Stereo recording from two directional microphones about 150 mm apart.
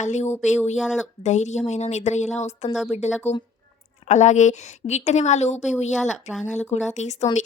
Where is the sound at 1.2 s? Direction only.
50° left (ahead or behind).